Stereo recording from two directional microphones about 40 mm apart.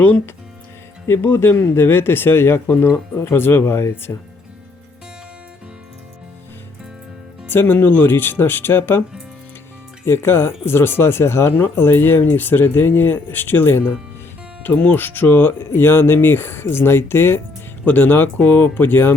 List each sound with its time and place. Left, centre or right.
1.0 s speech: left
7.4 s speech: left
10.1 s speech: left
15.7 s speech: left
17.8 s speech: left